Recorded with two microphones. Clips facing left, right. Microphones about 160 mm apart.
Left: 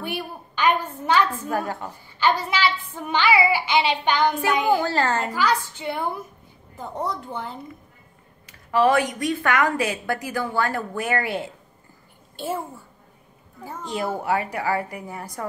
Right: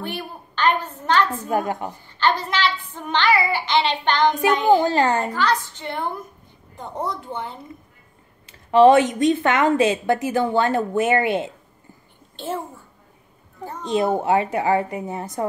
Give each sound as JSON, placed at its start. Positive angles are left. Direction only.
{"t": 0.0, "sound": "a woman's voice", "side_deg": 10}
{"t": 1.5, "sound": "a child's voice", "side_deg": -20}
{"t": 2.0, "sound": "a child's voice", "side_deg": 10}
{"t": 4.8, "sound": "a child's voice", "side_deg": -15}
{"t": 5.3, "sound": "a child's voice", "side_deg": 10}
{"t": 8.5, "sound": "speech", "side_deg": -25}
{"t": 12.4, "sound": "a child's voice", "side_deg": 10}
{"t": 13.8, "sound": "speech", "side_deg": -20}